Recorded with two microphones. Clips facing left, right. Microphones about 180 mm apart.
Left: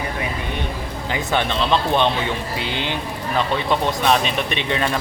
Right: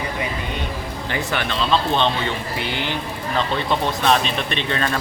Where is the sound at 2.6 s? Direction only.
20° left (ahead or behind).